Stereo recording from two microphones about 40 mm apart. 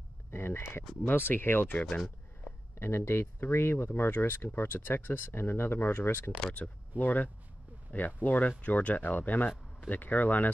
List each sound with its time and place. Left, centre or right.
0.3 s speech: left
1.0 s speech: left
1.9 s speech: centre
2.8 s speech: left
4.6 s speech: left
7.0 s speech: left